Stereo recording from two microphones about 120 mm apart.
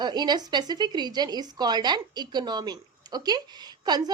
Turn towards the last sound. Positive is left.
turn(degrees=-35)  # may be behind; listen again after turning